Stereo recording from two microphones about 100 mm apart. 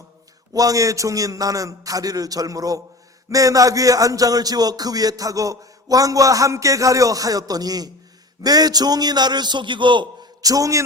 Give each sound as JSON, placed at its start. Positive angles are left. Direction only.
{"t": 0.5, "sound": "a man's voice", "side_deg": -35}
{"t": 10.4, "sound": "a man's voice", "side_deg": -35}